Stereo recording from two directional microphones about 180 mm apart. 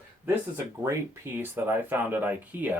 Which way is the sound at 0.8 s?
15° right (ahead or behind).